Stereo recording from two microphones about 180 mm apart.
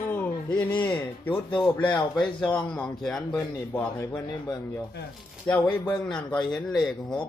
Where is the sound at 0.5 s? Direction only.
25° left (ahead or behind).